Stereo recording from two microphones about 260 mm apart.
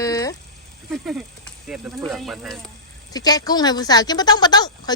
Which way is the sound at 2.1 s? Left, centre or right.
Centre.